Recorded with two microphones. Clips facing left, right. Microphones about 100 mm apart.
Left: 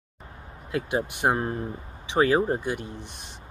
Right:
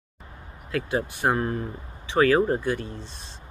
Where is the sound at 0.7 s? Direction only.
20° left (ahead or behind).